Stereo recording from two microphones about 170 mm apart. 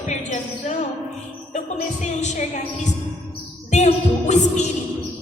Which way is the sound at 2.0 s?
45° left (ahead or behind).